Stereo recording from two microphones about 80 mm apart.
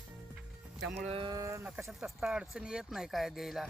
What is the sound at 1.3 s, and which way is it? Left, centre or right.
Speech, right.